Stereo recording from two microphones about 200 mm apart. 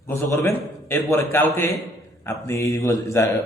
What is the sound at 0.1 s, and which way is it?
A man's voice, 15° left (ahead or behind).